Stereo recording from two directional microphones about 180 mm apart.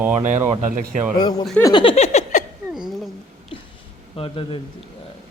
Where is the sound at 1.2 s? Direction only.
25° left (ahead or behind).